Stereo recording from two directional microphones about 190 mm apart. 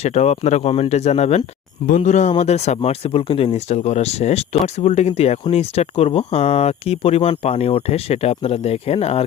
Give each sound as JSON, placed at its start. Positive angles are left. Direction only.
{"t": 0.0, "sound": "speech", "side_deg": 35}